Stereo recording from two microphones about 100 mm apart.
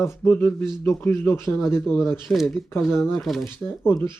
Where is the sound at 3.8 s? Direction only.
20° left (ahead or behind).